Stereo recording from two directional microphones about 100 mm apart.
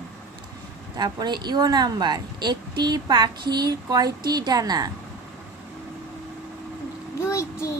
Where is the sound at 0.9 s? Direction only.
45° right (ahead or behind).